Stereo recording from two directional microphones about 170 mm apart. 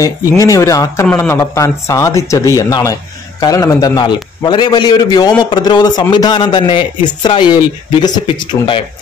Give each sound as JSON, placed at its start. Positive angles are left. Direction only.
{"t": 0.0, "sound": "a man's voice", "side_deg": 20}